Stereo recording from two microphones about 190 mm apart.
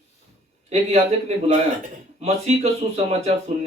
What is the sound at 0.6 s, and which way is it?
Speech, 35° right (ahead or behind).